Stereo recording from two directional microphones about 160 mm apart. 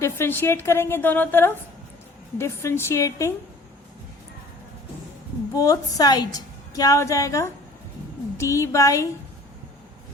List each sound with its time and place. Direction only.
0.0 s a woman's voice: 15° left (ahead or behind)
5.5 s a woman's voice: 20° left (ahead or behind)